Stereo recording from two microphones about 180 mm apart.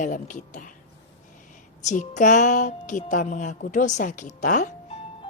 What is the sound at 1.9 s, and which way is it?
A child's voice, 45° left (ahead or behind).